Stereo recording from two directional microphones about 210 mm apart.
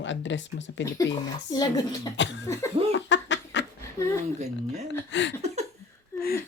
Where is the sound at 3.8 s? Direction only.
15° left (ahead or behind).